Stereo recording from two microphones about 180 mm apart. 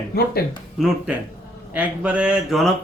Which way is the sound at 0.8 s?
Centre (ahead or behind).